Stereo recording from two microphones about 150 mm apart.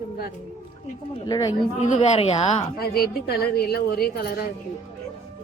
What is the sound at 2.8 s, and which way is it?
A woman's voice, 90° left.